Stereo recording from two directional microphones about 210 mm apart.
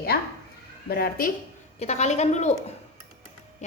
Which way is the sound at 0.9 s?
45° left (ahead or behind).